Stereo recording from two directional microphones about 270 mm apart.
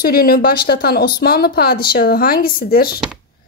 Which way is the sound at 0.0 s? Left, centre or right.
Left.